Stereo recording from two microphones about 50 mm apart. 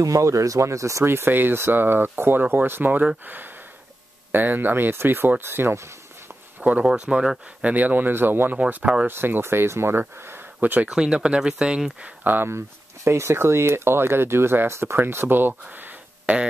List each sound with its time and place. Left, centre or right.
0.1 s speech: right
1.0 s speech: right
5.8 s a sound: right
6.8 s speech: centre
7.7 s speech: right
8.1 s speech: right
10.9 s speech: centre
12.2 s speech: right
12.4 s speech: right
15.7 s a sound: right
16.3 s speech: right